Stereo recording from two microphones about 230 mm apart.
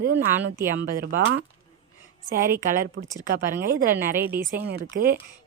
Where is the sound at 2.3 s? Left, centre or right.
Right.